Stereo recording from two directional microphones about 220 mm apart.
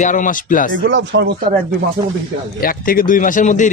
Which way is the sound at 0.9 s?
50° right (ahead or behind).